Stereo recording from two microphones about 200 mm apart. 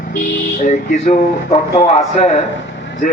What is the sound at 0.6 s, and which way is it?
A man's voice, 40° left (ahead or behind).